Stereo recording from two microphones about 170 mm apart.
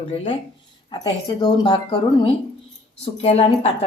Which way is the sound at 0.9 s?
25° left (ahead or behind).